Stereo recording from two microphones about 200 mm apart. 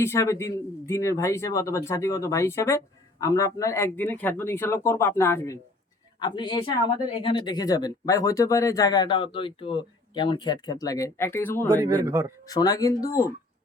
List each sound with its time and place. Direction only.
0.0 s speech: 15° left (ahead or behind)
6.1 s speech: 20° left (ahead or behind)
11.8 s a man's voice: 15° right (ahead or behind)
12.5 s speech: 20° left (ahead or behind)